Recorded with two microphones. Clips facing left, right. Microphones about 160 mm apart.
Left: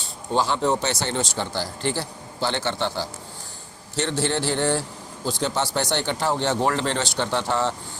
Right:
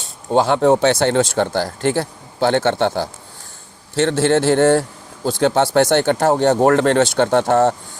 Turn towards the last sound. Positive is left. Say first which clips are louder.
# right 10 dB
turn(degrees=-50)  # may be behind; listen again after turning